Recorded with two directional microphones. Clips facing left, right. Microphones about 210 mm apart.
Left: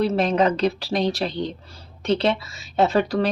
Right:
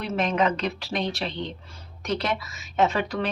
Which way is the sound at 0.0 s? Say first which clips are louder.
Left 5 dB; 35° left (ahead or behind).